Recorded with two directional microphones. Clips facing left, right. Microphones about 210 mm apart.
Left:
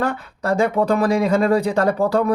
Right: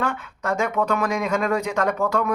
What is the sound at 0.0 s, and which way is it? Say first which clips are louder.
Speech: left 4 dB; 35° left (ahead or behind).